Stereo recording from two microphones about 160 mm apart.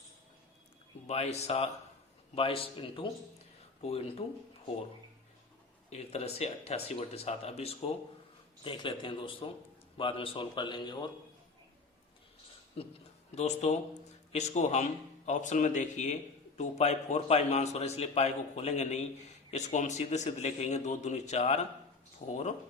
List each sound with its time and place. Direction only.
1.0 s speech: 40° left (ahead or behind)
5.9 s speech: 40° left (ahead or behind)
13.3 s a man's voice: 45° left (ahead or behind)